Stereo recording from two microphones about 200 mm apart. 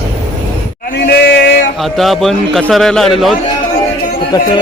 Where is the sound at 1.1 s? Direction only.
55° left (ahead or behind).